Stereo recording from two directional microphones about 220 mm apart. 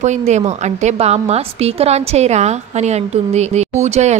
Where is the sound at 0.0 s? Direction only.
30° right (ahead or behind).